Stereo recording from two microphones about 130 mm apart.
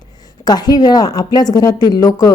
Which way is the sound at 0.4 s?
30° left (ahead or behind).